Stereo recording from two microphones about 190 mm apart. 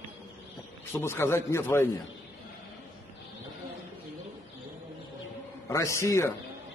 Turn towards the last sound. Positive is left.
turn(degrees=15)  # may be behind; listen again after turning